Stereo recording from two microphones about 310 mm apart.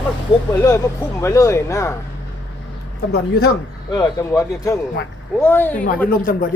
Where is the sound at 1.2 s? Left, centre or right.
Centre.